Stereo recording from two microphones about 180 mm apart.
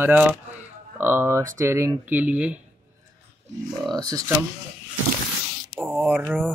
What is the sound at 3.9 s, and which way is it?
Speech, 20° right (ahead or behind).